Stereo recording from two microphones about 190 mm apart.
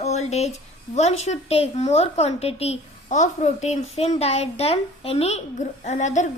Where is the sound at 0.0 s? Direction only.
35° left (ahead or behind).